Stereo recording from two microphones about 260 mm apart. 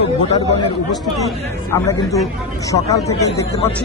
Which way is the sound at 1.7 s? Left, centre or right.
Centre.